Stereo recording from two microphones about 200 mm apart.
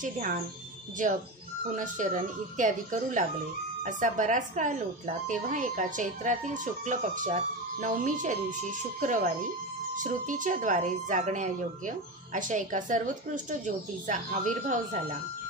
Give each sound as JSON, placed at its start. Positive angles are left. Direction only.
{"t": 0.0, "sound": "a woman's voice", "side_deg": -40}
{"t": 1.8, "sound": "a woman's voice", "side_deg": -40}